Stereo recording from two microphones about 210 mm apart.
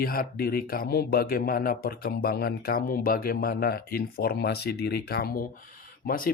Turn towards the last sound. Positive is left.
turn(degrees=45)  # may be behind; listen again after turning